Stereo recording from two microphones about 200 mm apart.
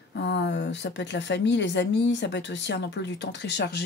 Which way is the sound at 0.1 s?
60° left (ahead or behind).